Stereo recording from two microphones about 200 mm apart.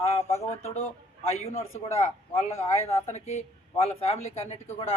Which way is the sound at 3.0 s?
35° left (ahead or behind).